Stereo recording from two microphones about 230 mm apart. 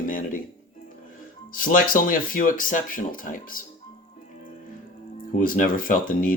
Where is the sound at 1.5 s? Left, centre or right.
Left.